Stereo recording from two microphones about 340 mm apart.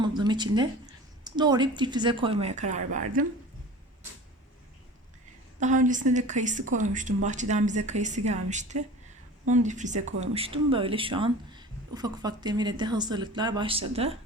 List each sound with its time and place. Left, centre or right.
0.0 s a sound: centre
1.2 s speech: centre
5.5 s a woman's voice: right